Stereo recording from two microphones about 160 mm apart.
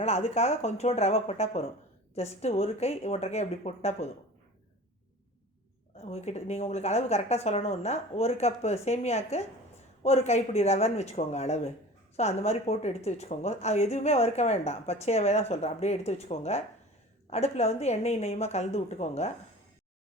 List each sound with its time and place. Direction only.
0.0 s speech: 40° left (ahead or behind)
6.0 s speech: 40° left (ahead or behind)